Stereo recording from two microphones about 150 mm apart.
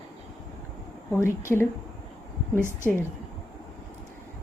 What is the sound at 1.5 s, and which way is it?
Speech, 5° left (ahead or behind).